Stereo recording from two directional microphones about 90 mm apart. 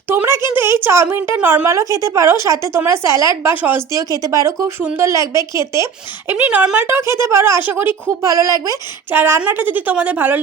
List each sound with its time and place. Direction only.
0.1 s speech: 25° right (ahead or behind)
1.6 s speech: 35° right (ahead or behind)
3.5 s speech: 20° right (ahead or behind)
3.9 s speech: 40° right (ahead or behind)
6.3 s speech: 15° right (ahead or behind)
6.7 s speech: 25° right (ahead or behind)
8.2 s speech: 40° right (ahead or behind)
9.1 s speech: 25° right (ahead or behind)